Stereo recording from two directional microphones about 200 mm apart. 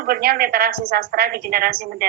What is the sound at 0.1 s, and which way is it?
A woman's voice, 50° right (ahead or behind).